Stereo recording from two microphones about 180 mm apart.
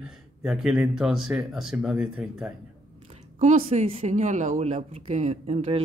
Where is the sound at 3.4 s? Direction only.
35° right (ahead or behind).